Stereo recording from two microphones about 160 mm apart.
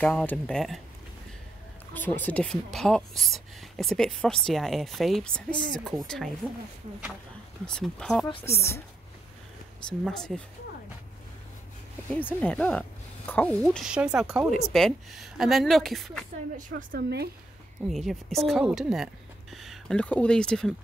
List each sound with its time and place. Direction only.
0.0 s speech: 10° left (ahead or behind)
2.0 s a woman's voice: 10° left (ahead or behind)
7.6 s a woman's voice: 5° left (ahead or behind)
9.8 s a woman's voice: 5° left (ahead or behind)
12.1 s a woman's voice: 10° left (ahead or behind)
16.5 s a woman's voice: 75° right (ahead or behind)
17.8 s a woman's voice: centre (ahead or behind)